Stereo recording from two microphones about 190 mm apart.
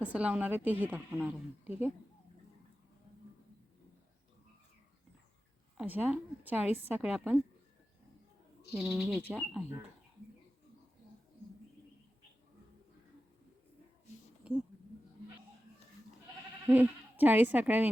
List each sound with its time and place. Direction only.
0.0 s a woman's voice: 5° right (ahead or behind)
5.7 s a woman's voice: 10° right (ahead or behind)
8.7 s speech: 5° right (ahead or behind)
16.6 s speech: 10° right (ahead or behind)